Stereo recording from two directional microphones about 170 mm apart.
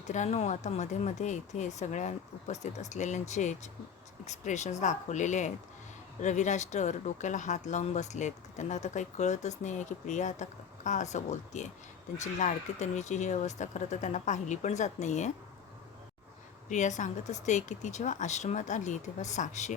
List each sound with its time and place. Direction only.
0.1 s speech: 45° left (ahead or behind)
16.6 s speech: 45° left (ahead or behind)